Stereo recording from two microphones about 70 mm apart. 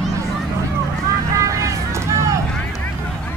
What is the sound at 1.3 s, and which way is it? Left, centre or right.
Vehicle, right.